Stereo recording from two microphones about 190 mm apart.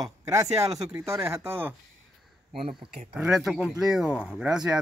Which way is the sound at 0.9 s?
15° right (ahead or behind).